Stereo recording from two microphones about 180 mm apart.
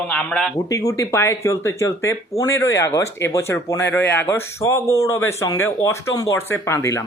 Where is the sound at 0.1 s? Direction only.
5° left (ahead or behind).